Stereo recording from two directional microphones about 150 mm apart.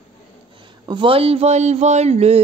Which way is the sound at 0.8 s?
35° right (ahead or behind).